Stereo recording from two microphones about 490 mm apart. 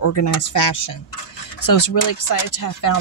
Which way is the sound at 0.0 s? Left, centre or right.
Left.